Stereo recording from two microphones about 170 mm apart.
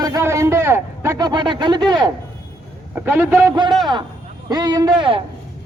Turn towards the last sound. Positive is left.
turn(degrees=-30)  # may be behind; listen again after turning